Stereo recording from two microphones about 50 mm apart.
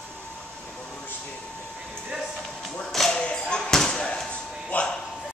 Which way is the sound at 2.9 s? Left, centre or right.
Centre.